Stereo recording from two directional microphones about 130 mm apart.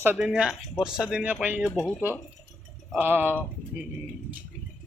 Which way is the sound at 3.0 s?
15° right (ahead or behind).